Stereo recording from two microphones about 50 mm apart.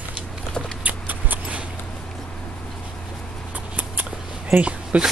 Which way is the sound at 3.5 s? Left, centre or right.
Right.